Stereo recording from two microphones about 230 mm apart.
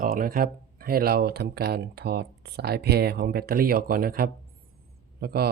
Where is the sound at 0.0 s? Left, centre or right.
Right.